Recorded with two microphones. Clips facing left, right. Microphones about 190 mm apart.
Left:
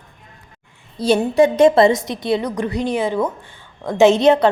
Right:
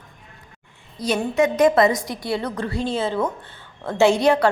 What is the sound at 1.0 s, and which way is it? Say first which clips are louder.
A woman's voice: left 6 dB; 30° left (ahead or behind).